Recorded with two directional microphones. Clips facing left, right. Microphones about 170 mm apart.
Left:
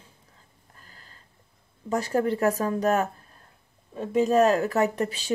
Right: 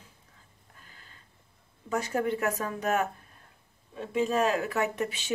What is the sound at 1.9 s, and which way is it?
A woman's voice, 35° left (ahead or behind).